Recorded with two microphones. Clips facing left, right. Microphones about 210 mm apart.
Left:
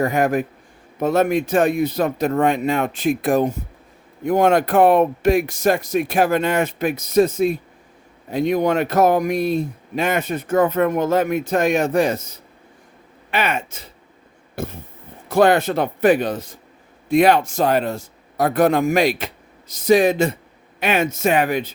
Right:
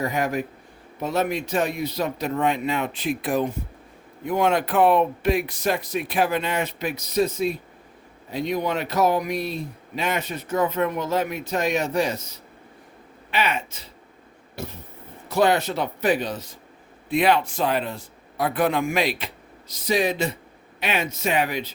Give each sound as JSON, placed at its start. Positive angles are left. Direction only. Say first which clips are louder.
{"t": 0.0, "sound": "speech", "louder": "left 6 dB", "side_deg": 50}
{"t": 13.3, "sound": "speech", "louder": "left 3 dB", "side_deg": 50}